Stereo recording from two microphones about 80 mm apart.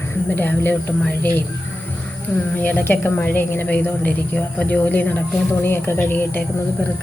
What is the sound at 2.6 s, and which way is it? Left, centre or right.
A woman's voice, left.